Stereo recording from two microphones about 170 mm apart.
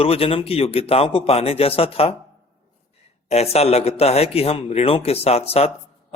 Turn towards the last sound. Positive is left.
turn(degrees=35)  # may be behind; listen again after turning